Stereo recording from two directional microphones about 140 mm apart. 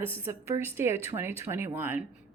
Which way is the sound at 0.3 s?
20° right (ahead or behind).